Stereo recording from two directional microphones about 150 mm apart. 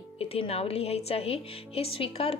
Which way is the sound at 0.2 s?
40° left (ahead or behind).